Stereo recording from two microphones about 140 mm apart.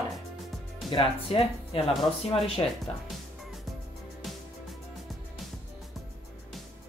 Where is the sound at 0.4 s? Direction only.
Centre (ahead or behind).